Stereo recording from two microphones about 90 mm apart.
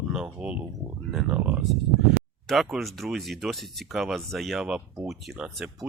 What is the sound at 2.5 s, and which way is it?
Speech, centre (ahead or behind).